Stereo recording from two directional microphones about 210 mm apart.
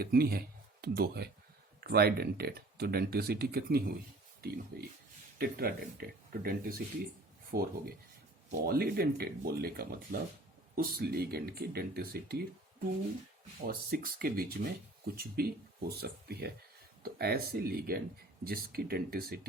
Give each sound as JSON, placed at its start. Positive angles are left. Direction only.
{"t": 0.0, "sound": "speech", "side_deg": -45}
{"t": 13.7, "sound": "speech", "side_deg": -45}